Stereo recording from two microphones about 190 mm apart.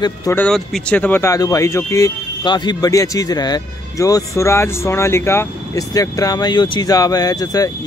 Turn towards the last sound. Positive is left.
turn(degrees=20)  # may be behind; listen again after turning